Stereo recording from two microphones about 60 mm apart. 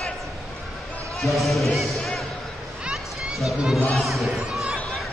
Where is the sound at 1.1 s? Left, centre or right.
Centre.